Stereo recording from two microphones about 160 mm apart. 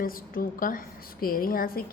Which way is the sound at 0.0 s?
65° left (ahead or behind).